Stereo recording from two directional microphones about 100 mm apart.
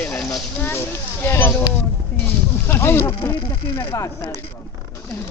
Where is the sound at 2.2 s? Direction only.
25° left (ahead or behind).